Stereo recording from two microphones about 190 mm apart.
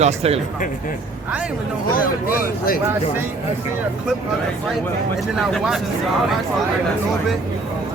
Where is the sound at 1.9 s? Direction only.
50° left (ahead or behind).